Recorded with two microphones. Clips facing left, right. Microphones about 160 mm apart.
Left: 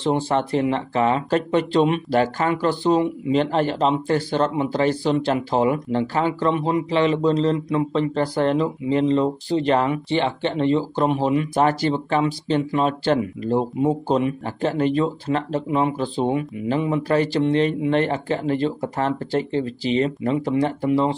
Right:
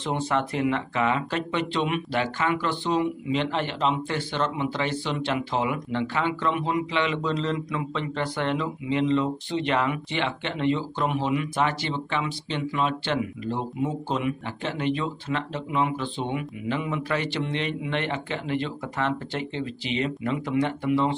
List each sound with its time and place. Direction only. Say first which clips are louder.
0.0 s speech: left 5 dB; 30° left (ahead or behind)